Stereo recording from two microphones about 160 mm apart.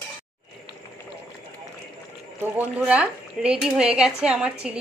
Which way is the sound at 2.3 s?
10° right (ahead or behind).